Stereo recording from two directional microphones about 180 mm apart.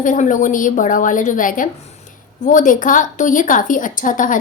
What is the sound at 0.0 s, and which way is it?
A woman's voice, 45° left (ahead or behind).